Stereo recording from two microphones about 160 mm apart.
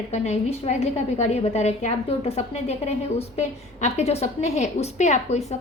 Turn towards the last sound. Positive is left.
turn(degrees=45)  # may be behind; listen again after turning